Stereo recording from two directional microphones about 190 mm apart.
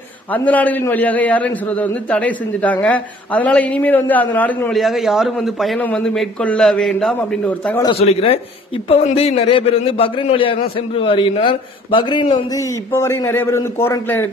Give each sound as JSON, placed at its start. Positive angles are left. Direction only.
{"t": 0.3, "sound": "a man's voice", "side_deg": 10}
{"t": 8.0, "sound": "a man's voice", "side_deg": 30}
{"t": 12.9, "sound": "a man's voice", "side_deg": 15}